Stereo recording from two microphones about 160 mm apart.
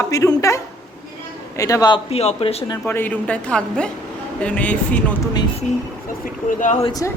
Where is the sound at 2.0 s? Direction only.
40° left (ahead or behind).